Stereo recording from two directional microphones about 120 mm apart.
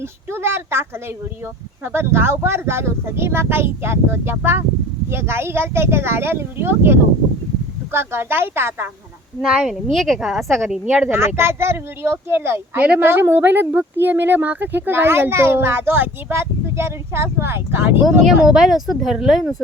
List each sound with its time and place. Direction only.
0.0 s speech: 20° right (ahead or behind)
9.4 s speech: 5° right (ahead or behind)
11.1 s speech: 20° right (ahead or behind)
18.4 s speech: 5° right (ahead or behind)